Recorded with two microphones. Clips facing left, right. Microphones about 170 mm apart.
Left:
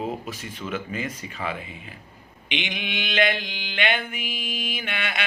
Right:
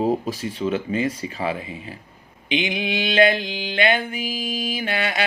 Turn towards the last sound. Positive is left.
turn(degrees=-35)  # may be behind; listen again after turning